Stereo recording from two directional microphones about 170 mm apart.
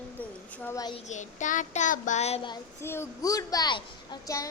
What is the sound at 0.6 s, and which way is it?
Speech, 15° left (ahead or behind).